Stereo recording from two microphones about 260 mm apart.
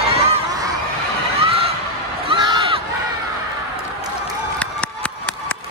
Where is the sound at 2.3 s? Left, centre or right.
Centre.